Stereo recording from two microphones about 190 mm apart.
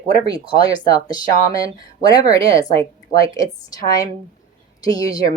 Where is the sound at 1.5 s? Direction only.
20° left (ahead or behind).